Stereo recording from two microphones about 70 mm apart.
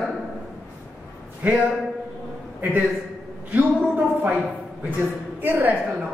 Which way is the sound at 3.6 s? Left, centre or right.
Right.